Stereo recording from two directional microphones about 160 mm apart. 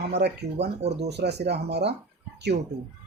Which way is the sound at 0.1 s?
90° right.